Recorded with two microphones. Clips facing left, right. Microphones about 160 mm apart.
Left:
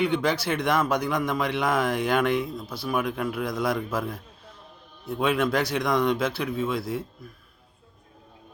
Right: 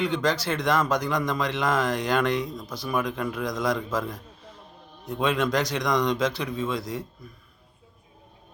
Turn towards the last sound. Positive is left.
turn(degrees=5)  # may be behind; listen again after turning